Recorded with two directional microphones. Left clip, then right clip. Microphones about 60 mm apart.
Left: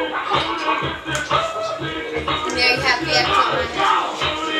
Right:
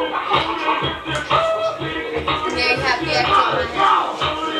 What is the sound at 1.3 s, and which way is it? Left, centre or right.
Music, right.